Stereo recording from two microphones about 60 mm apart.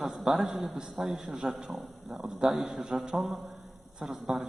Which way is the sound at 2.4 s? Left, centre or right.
Centre.